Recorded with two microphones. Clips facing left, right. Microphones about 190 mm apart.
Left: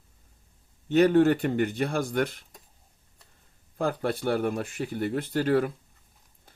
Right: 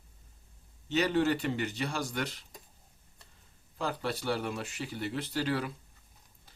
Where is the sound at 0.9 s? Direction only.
50° left (ahead or behind).